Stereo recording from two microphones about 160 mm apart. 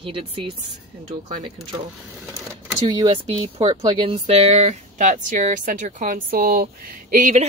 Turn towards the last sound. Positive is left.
turn(degrees=-50)  # may be behind; listen again after turning